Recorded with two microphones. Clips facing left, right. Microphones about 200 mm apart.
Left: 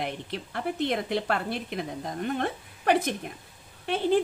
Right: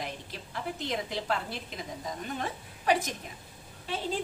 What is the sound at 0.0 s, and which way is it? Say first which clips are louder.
A woman's voice: left 6 dB; 60° left (ahead or behind).